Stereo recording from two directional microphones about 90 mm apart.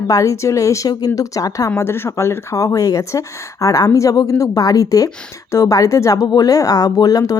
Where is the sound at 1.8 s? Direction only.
25° left (ahead or behind).